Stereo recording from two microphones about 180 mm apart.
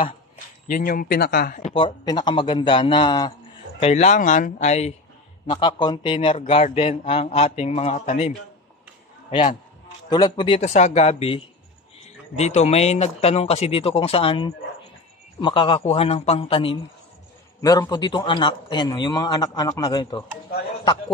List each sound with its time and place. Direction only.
0.7 s speech: 50° left (ahead or behind)
1.6 s a man's voice: 30° left (ahead or behind)
3.8 s a man's voice: 40° left (ahead or behind)
5.5 s a man's voice: 25° left (ahead or behind)
10.0 s a man's voice: 25° left (ahead or behind)
17.6 s a man's voice: 20° left (ahead or behind)